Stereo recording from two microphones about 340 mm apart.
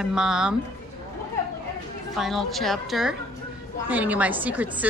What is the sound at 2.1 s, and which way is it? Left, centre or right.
Speech, centre.